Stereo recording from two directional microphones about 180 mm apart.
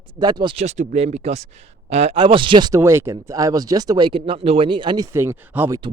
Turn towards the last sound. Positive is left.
turn(degrees=-15)  # may be behind; listen again after turning